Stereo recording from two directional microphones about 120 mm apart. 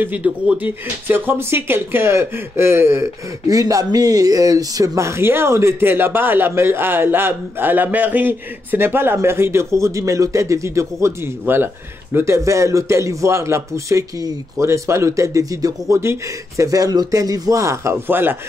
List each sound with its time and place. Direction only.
0.0 s speech: 10° right (ahead or behind)